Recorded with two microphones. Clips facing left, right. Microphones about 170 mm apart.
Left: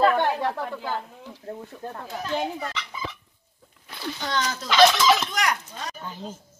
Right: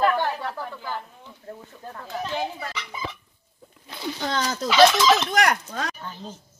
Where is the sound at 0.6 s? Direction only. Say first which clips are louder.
Left 3 dB; 25° left (ahead or behind).